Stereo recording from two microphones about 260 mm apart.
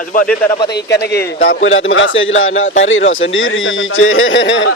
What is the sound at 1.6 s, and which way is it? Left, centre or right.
A man's voice, left.